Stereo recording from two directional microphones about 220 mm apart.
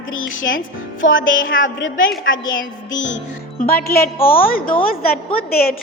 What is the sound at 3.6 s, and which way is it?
Speech, 45° left (ahead or behind).